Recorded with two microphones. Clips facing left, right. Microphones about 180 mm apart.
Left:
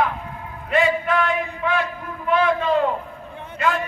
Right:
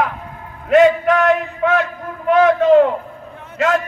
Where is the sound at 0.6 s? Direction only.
80° right.